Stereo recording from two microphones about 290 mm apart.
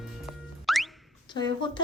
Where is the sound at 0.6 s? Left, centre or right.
Centre.